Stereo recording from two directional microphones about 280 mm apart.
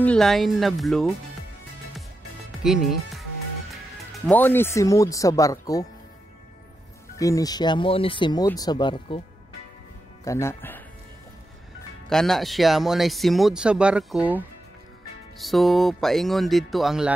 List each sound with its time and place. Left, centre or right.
0.0 s speech: centre
2.6 s speech: centre
7.2 s speech: centre
10.2 s speech: centre
12.1 s speech: centre